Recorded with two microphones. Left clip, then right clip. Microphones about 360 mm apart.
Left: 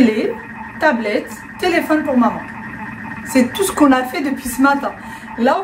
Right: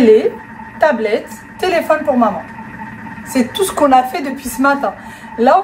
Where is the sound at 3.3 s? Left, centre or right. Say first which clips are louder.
Even; centre.